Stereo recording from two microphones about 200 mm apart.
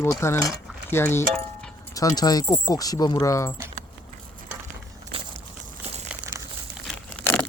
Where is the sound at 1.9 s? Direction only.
20° left (ahead or behind).